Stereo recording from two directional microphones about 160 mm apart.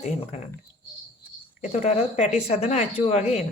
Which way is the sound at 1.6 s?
45° left (ahead or behind).